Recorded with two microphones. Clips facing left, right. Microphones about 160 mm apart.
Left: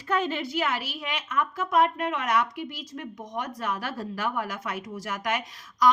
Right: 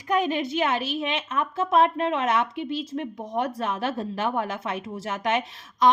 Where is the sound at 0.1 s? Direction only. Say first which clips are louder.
Right 3 dB; 15° right (ahead or behind).